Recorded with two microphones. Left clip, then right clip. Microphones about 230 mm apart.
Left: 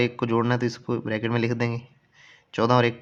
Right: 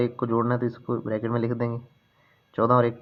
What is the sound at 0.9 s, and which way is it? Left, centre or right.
Speech, left.